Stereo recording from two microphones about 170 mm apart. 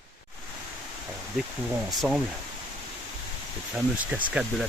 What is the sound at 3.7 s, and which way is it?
Speech, 10° right (ahead or behind).